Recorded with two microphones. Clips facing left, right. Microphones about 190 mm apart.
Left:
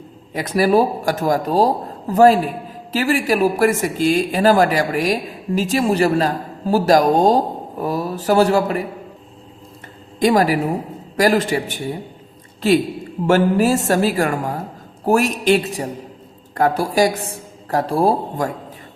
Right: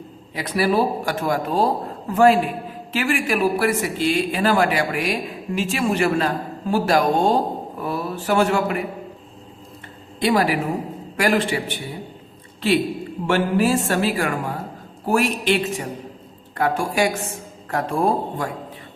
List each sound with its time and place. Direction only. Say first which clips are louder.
0.3 s a woman's voice: left 4 dB; 45° left (ahead or behind)
10.2 s a woman's voice: left 4 dB; 45° left (ahead or behind)
13.2 s a woman's voice: left 4 dB; 40° left (ahead or behind)